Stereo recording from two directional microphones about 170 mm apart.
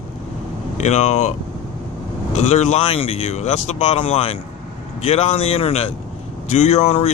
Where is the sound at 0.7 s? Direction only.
40° left (ahead or behind).